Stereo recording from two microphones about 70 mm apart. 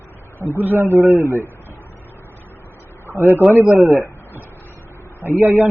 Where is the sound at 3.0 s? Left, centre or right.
Right.